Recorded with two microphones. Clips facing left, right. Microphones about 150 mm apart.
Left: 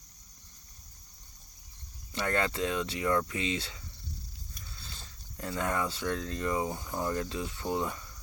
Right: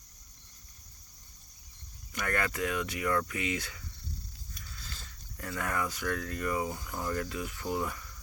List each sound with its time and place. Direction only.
2.1 s speech: 25° left (ahead or behind)